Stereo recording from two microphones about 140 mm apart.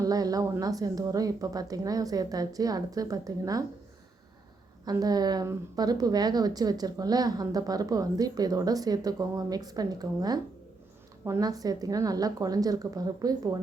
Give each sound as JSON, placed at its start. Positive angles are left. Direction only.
{"t": 0.0, "sound": "a woman's voice", "side_deg": -25}
{"t": 4.9, "sound": "a woman's voice", "side_deg": -25}